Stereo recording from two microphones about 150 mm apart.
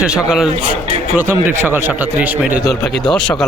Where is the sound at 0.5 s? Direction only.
40° right (ahead or behind).